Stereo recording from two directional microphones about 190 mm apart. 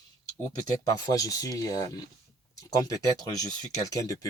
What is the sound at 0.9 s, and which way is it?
Speech, 20° left (ahead or behind).